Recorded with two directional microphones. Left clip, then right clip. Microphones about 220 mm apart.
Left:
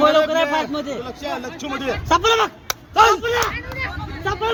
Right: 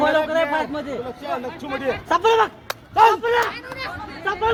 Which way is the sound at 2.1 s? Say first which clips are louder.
Left 1 dB; 45° left (ahead or behind).